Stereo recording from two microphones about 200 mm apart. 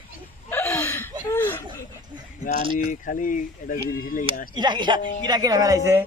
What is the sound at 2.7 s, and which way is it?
Speech, 40° left (ahead or behind).